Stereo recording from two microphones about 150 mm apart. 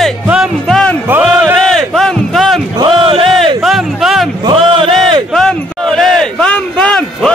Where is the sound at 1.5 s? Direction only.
5° left (ahead or behind).